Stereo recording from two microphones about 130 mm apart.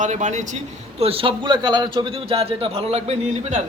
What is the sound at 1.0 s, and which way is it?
A man's voice, 45° right (ahead or behind).